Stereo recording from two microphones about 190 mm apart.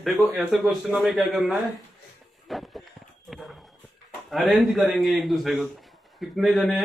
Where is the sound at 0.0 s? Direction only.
Centre (ahead or behind).